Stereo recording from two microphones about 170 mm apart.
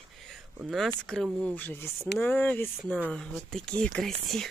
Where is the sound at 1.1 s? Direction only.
5° left (ahead or behind).